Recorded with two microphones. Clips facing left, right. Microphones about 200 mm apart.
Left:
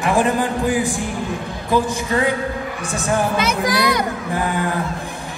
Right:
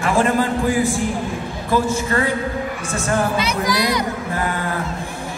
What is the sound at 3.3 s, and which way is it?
Speech, 55° left (ahead or behind).